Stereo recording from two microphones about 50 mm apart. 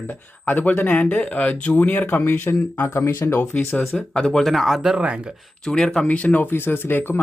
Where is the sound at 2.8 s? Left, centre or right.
Left.